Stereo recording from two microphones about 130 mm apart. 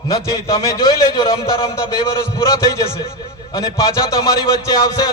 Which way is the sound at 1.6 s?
25° left (ahead or behind).